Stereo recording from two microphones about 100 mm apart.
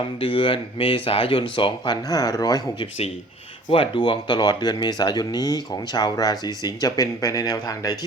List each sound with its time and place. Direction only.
0.2 s speech: 60° left (ahead or behind)
2.0 s speech: 40° left (ahead or behind)
3.7 s speech: 60° left (ahead or behind); by 7.9 s 40° left (ahead or behind)